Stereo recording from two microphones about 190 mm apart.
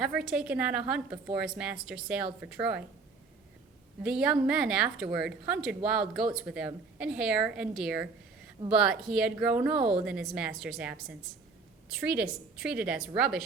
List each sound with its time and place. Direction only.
0.0 s a woman's voice: 5° right (ahead or behind)
4.0 s a woman's voice: 5° right (ahead or behind)
9.7 s a woman's voice: 25° right (ahead or behind)
10.0 s a woman's voice: 5° right (ahead or behind)